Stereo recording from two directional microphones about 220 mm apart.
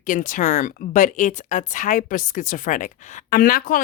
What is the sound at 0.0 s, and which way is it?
A woman's voice, 35° left (ahead or behind).